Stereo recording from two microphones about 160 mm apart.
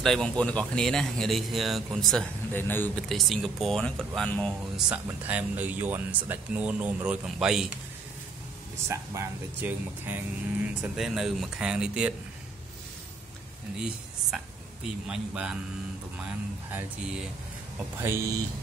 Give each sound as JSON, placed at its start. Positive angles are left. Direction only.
{"t": 0.0, "sound": "speech", "side_deg": 5}
{"t": 3.1, "sound": "speech", "side_deg": 0}
{"t": 4.8, "sound": "speech", "side_deg": -10}
{"t": 8.8, "sound": "speech", "side_deg": -15}
{"t": 13.7, "sound": "speech", "side_deg": -5}
{"t": 16.7, "sound": "speech", "side_deg": -5}
{"t": 18.0, "sound": "speech", "side_deg": -15}